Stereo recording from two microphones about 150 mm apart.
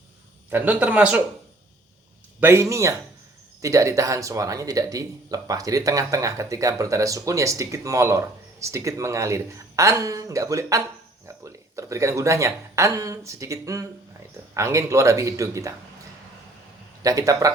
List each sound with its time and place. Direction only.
0.5 s speech: 10° right (ahead or behind)
2.4 s speech: 15° right (ahead or behind)
17.0 s speech: 20° right (ahead or behind)